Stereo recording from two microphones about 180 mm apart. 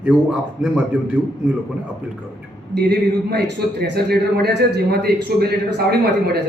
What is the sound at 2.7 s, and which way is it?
Speech, 65° right (ahead or behind).